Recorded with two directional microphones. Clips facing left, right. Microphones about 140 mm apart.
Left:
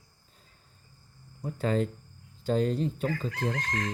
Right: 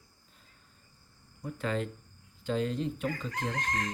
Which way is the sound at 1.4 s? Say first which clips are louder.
Left 5 dB; 35° left (ahead or behind).